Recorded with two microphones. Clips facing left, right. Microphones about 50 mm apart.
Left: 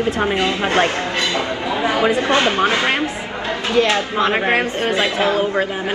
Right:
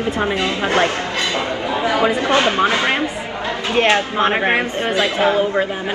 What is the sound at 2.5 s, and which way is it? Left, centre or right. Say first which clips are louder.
Speech: even; right.